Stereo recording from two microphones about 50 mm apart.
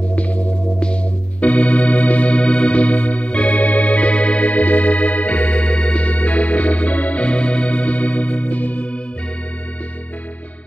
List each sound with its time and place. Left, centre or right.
0.1 s music: left
1.4 s keyboard: left